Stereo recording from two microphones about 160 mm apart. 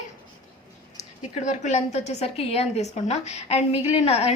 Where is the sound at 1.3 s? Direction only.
45° left (ahead or behind).